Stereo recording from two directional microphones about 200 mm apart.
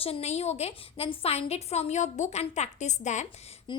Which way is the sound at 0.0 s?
30° left (ahead or behind).